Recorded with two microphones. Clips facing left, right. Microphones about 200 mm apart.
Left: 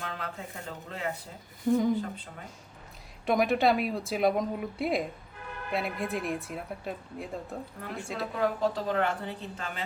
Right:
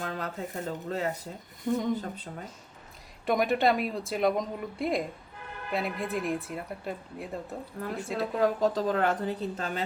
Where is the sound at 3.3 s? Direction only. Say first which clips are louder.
Even; centre (ahead or behind).